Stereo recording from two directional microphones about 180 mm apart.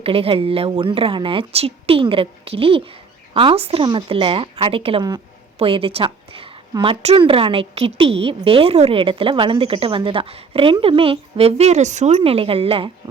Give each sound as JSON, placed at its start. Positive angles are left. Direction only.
{"t": 0.0, "sound": "a woman's voice", "side_deg": -30}